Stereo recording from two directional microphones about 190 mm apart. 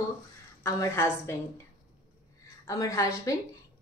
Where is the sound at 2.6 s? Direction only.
15° left (ahead or behind).